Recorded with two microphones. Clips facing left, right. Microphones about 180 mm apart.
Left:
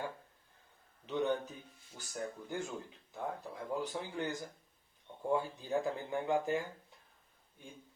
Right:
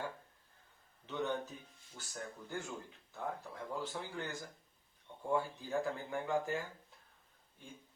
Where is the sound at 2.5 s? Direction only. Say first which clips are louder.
Left 3 dB; 20° left (ahead or behind).